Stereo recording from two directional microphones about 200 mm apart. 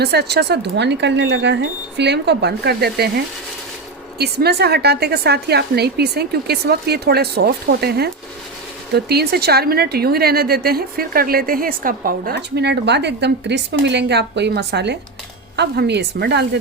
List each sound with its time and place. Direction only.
0.0 s speech: 55° right (ahead or behind)
4.2 s a woman's voice: 55° right (ahead or behind)